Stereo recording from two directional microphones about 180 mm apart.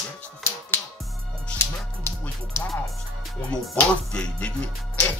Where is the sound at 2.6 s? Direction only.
15° left (ahead or behind).